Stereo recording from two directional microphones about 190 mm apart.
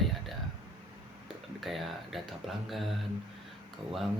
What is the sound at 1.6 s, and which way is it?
Speech, centre (ahead or behind).